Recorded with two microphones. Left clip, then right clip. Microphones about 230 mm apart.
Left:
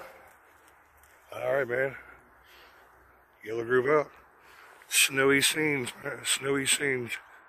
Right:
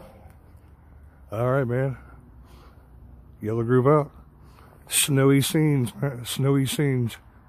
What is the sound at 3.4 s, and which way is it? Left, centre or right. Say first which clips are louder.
Speech: right 5 dB; centre.